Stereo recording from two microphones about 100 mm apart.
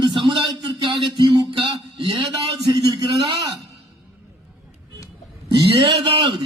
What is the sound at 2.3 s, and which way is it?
Speech, 45° right (ahead or behind).